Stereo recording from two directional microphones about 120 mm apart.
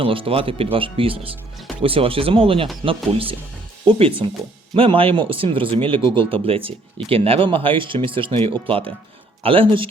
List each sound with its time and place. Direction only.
0.0 s speech: 50° right (ahead or behind)